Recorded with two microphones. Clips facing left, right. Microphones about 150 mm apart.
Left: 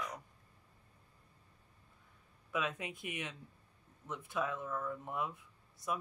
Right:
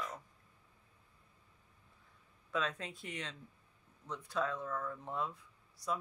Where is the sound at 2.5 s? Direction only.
15° left (ahead or behind).